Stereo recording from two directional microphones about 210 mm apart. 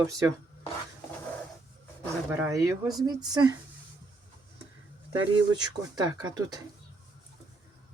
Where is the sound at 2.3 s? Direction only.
15° right (ahead or behind).